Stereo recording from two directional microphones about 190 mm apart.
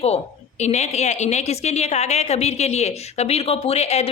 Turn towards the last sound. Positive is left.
turn(degrees=35)  # may be behind; listen again after turning